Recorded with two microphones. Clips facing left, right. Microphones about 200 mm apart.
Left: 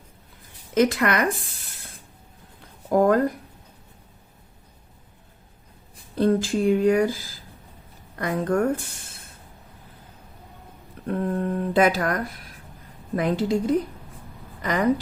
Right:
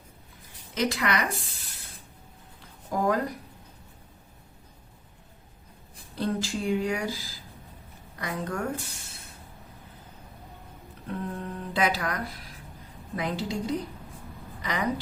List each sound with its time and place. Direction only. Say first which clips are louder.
0.7 s speech: left 7 dB; 50° left (ahead or behind)
2.9 s speech: left 8 dB; 55° left (ahead or behind)
6.1 s speech: left 9 dB; 55° left (ahead or behind)
11.1 s a woman's voice: left 9 dB; 55° left (ahead or behind)